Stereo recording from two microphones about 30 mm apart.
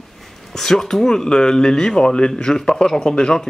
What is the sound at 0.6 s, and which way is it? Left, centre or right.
Speech, centre.